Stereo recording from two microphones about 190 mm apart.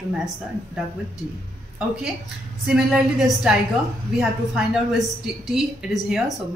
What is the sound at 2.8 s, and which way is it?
A woman's voice, 5° right (ahead or behind).